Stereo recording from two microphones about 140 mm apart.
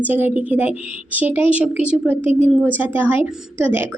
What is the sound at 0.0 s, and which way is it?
A woman's voice, 10° right (ahead or behind).